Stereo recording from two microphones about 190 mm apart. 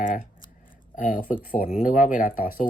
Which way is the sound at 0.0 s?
45° left (ahead or behind).